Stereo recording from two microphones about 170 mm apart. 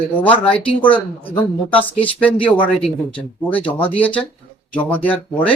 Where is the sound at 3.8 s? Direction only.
10° left (ahead or behind).